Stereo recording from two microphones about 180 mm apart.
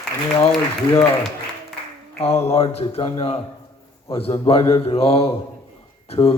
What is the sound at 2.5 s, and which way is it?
Speech, 35° left (ahead or behind).